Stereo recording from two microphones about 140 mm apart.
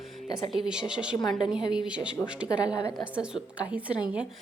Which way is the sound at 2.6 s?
25° left (ahead or behind).